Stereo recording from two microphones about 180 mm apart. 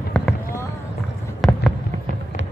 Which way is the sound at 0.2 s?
5° left (ahead or behind).